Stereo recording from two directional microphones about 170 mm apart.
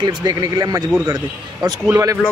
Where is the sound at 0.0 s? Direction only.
25° right (ahead or behind).